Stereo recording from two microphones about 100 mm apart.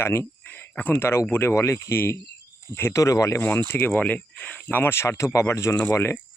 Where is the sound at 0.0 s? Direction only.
25° left (ahead or behind).